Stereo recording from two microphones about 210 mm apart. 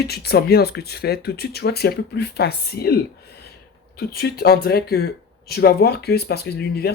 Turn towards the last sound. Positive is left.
turn(degrees=50)  # may be behind; listen again after turning